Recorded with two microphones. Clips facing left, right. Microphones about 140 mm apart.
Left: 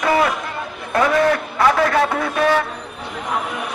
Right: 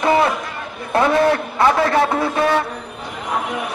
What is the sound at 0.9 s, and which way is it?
A man's voice, 25° right (ahead or behind).